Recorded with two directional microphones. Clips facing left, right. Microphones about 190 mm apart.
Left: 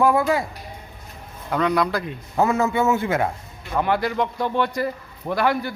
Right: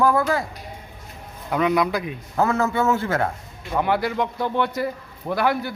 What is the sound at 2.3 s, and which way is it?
Speech, 15° left (ahead or behind).